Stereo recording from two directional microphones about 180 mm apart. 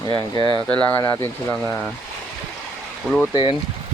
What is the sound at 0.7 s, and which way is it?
Speech, 10° left (ahead or behind).